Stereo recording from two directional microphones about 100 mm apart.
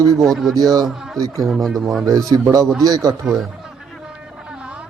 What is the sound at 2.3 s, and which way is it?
Speech, 35° right (ahead or behind).